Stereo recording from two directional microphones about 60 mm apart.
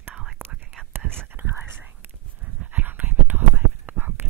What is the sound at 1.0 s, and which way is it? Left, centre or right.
Whispering, centre.